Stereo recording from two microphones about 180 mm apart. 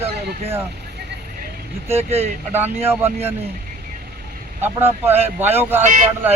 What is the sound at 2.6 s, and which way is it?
Speech, 10° right (ahead or behind).